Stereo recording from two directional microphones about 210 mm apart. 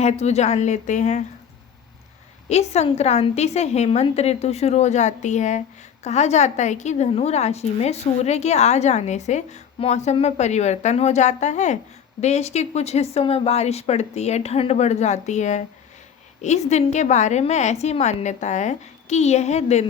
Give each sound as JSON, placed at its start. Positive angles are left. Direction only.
{"t": 0.0, "sound": "a woman's voice", "side_deg": 30}
{"t": 2.5, "sound": "a woman's voice", "side_deg": 30}